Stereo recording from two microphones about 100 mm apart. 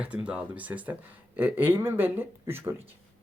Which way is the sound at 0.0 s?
10° right (ahead or behind).